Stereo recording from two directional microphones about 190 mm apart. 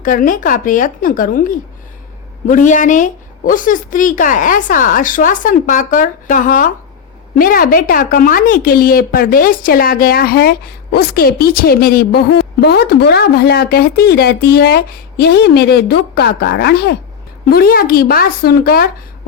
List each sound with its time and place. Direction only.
0.0 s a woman's voice: 45° left (ahead or behind)